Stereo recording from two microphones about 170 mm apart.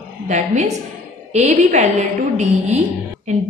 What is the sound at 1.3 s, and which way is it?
Speech, 45° right (ahead or behind).